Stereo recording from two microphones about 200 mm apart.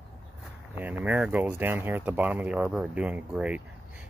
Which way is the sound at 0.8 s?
10° right (ahead or behind).